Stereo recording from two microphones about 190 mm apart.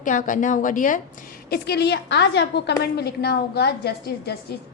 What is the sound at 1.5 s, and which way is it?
A woman's voice, 60° left (ahead or behind).